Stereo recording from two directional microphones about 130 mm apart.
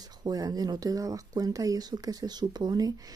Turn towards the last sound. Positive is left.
turn(degrees=-30)  # may be behind; listen again after turning